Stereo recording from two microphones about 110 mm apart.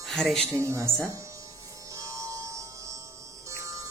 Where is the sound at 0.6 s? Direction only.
25° right (ahead or behind).